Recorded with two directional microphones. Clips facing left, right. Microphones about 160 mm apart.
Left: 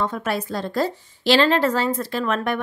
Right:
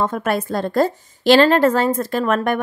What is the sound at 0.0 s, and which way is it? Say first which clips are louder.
A woman's voice: right 4 dB; 50° right (ahead or behind).